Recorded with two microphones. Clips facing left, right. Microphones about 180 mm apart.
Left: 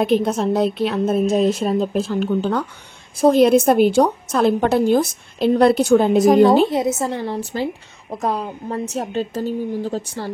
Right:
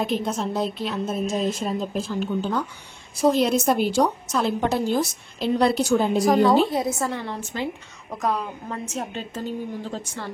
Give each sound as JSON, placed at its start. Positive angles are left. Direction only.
{"t": 0.0, "sound": "a woman's voice", "side_deg": 65}
{"t": 3.2, "sound": "a woman's voice", "side_deg": 55}
{"t": 6.2, "sound": "a woman's voice", "side_deg": 20}
{"t": 7.2, "sound": "a woman's voice", "side_deg": 35}